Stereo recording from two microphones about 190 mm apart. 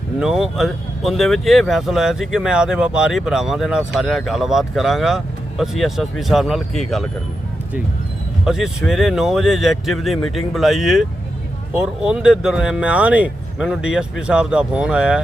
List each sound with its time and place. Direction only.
0.2 s speech: centre (ahead or behind)
8.4 s speech: centre (ahead or behind)